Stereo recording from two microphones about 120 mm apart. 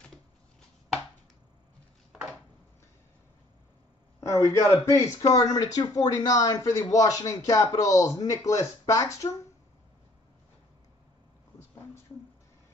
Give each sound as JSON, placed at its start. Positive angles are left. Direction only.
{"t": 4.2, "sound": "speech", "side_deg": 25}